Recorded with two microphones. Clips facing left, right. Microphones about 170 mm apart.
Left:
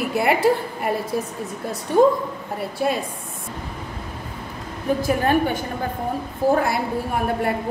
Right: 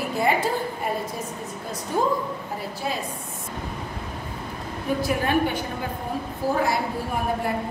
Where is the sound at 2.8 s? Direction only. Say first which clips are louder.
Left 8 dB; 60° left (ahead or behind).